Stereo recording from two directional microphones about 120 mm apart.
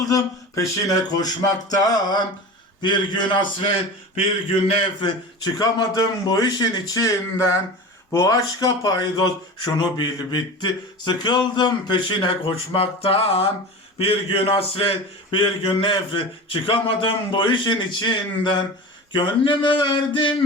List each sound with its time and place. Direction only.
0.1 s speech: 30° left (ahead or behind)
4.9 s a man's voice: 40° left (ahead or behind)